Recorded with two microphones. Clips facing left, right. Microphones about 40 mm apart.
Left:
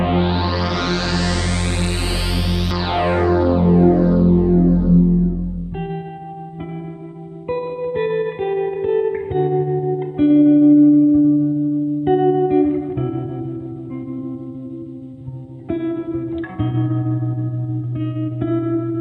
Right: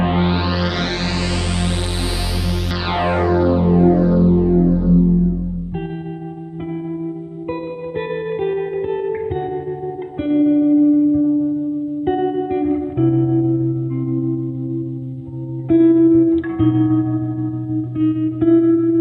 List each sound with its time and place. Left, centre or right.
0.8 s music: right
7.4 s music: centre
15.7 s music: centre